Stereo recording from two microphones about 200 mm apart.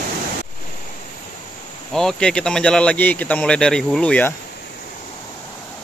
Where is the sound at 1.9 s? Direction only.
5° left (ahead or behind).